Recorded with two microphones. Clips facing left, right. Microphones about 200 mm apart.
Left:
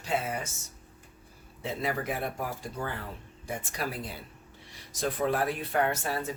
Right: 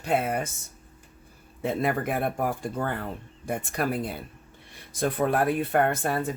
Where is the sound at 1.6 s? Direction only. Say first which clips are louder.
Right 6 dB; 55° right (ahead or behind).